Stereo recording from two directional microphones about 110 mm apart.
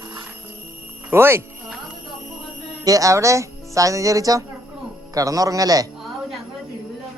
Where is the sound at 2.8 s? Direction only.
30° right (ahead or behind).